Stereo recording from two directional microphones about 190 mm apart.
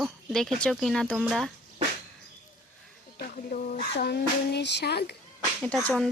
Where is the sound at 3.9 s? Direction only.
60° left (ahead or behind).